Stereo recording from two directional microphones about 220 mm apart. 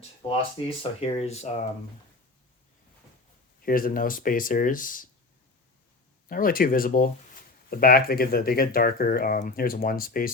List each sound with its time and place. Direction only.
0.8 s speech: 25° left (ahead or behind)
3.6 s speech: 40° left (ahead or behind)
6.2 s speech: 40° left (ahead or behind)